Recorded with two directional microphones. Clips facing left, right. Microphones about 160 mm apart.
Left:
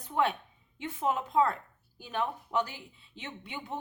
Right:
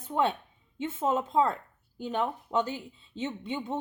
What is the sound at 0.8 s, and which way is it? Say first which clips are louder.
Speech: right 3 dB; 20° right (ahead or behind).